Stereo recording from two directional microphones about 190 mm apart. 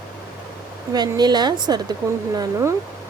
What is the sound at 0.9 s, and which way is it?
Speech, 20° right (ahead or behind).